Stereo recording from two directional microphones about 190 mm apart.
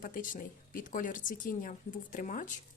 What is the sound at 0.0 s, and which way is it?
Speech, 45° left (ahead or behind).